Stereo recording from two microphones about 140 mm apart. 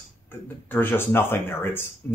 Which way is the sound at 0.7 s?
15° left (ahead or behind).